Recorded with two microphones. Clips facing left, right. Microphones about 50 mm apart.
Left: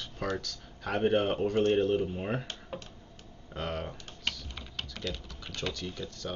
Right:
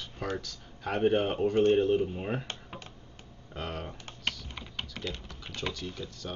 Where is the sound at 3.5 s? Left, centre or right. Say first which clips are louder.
Left 2 dB; centre.